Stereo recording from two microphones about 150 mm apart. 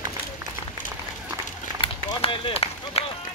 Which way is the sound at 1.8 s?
35° left (ahead or behind).